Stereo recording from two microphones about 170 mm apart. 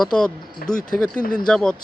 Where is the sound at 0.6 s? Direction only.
60° left (ahead or behind).